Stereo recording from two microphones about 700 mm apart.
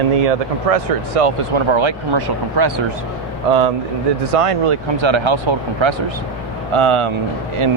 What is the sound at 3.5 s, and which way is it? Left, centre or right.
Speech, right.